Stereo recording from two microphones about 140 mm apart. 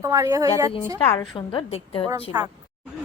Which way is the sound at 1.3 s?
35° left (ahead or behind).